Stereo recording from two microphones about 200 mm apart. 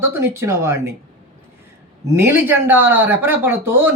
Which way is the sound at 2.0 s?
15° right (ahead or behind).